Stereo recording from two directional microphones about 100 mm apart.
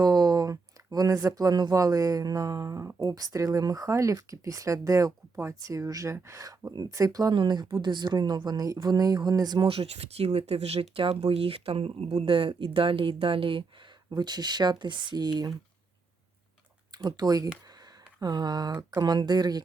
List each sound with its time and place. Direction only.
0.0 s speech: 40° right (ahead or behind)
9.6 s speech: 80° right; by 13.7 s 60° right (ahead or behind)
14.1 s speech: 45° right (ahead or behind)
17.0 s speech: 45° right (ahead or behind)